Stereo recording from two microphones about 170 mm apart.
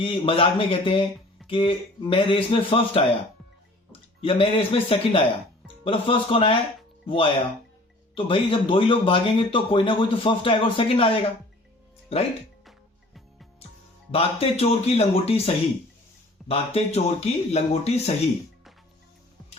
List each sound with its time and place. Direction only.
0.0 s speech: 30° left (ahead or behind)
4.2 s speech: 30° left (ahead or behind)
14.1 s speech: 35° left (ahead or behind)